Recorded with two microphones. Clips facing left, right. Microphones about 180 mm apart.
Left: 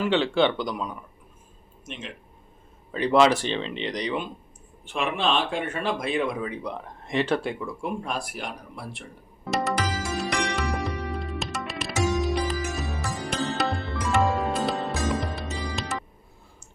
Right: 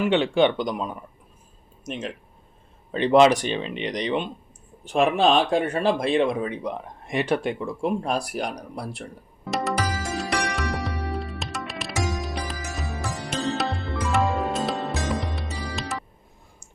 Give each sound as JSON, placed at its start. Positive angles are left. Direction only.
{"t": 0.0, "sound": "speech", "side_deg": -15}
{"t": 1.9, "sound": "speech", "side_deg": -40}
{"t": 2.9, "sound": "speech", "side_deg": -20}
{"t": 4.9, "sound": "speech", "side_deg": -40}
{"t": 9.4, "sound": "music", "side_deg": 0}